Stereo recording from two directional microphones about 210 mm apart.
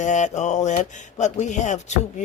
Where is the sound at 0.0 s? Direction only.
35° left (ahead or behind).